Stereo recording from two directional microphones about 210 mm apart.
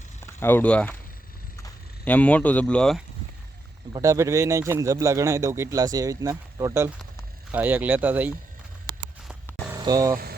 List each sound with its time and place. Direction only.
0.3 s speech: 10° left (ahead or behind)
3.9 s speech: 15° right (ahead or behind)
9.7 s speech: 20° right (ahead or behind)